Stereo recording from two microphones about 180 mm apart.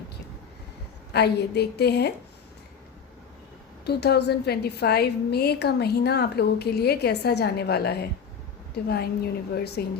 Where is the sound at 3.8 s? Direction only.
65° left (ahead or behind).